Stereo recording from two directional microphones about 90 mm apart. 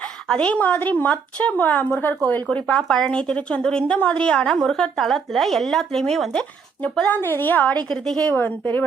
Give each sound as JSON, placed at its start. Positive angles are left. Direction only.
{"t": 0.3, "sound": "a woman's voice", "side_deg": 10}
{"t": 7.1, "sound": "a woman's voice", "side_deg": 25}
{"t": 7.9, "sound": "a woman's voice", "side_deg": 5}
{"t": 8.3, "sound": "a woman's voice", "side_deg": 20}